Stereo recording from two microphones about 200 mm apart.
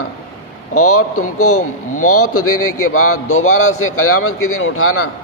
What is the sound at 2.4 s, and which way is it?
A man's voice, 90° left.